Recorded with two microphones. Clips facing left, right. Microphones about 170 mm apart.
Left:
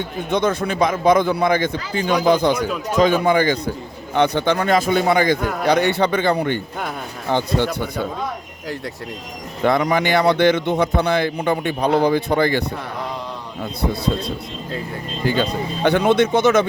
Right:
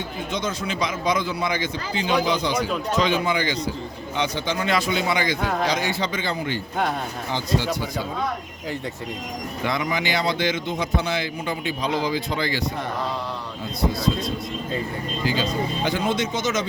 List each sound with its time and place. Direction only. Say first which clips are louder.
0.3 s a man's voice: left 9 dB; 60° left (ahead or behind)
5.6 s speech: left 7 dB; 60° left (ahead or behind)
9.6 s speech: left 8 dB; 55° left (ahead or behind)
15.2 s speech: left 4 dB; 60° left (ahead or behind)